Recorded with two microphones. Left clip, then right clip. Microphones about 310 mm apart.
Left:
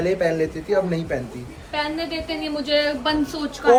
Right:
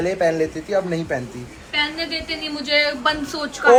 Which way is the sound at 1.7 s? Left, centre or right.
Left.